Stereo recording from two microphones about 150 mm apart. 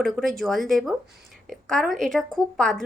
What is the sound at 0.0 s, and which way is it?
A woman's voice, centre (ahead or behind).